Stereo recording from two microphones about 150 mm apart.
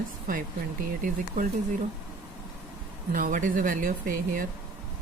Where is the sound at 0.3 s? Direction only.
65° right (ahead or behind).